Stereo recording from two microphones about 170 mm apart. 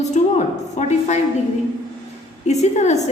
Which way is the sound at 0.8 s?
45° left (ahead or behind).